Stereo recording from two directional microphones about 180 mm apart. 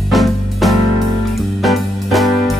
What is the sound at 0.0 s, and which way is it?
Music, centre (ahead or behind).